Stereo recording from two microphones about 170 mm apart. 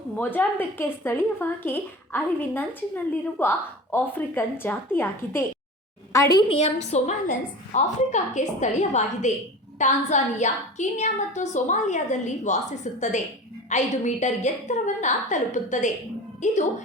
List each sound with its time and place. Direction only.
0.2 s a woman's voice: 10° left (ahead or behind)
6.6 s a woman's voice: 40° left (ahead or behind)